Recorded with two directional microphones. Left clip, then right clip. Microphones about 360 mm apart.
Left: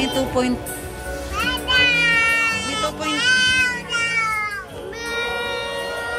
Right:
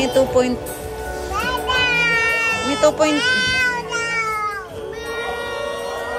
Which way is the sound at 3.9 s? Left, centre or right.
Centre.